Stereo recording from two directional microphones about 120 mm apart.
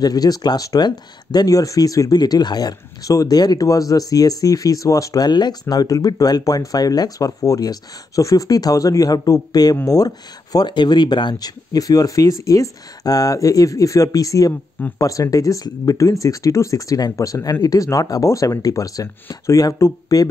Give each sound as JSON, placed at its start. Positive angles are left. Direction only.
{"t": 0.0, "sound": "speech", "side_deg": 35}